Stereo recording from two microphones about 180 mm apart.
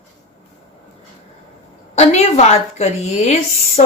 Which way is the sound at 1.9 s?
35° left (ahead or behind).